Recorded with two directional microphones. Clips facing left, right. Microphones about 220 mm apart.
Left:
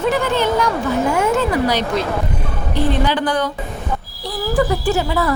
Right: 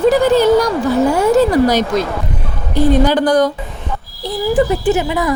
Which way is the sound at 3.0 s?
40° right (ahead or behind).